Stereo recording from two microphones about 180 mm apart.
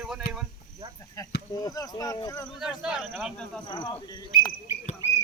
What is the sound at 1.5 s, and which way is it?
Speech, 20° left (ahead or behind).